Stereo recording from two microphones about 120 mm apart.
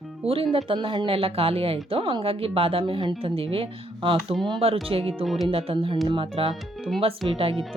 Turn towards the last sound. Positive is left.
turn(degrees=-50)  # may be behind; listen again after turning